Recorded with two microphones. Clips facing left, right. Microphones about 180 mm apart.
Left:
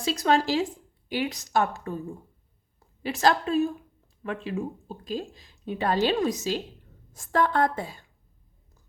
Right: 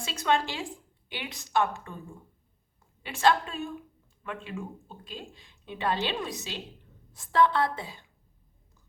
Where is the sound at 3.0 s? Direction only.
40° left (ahead or behind).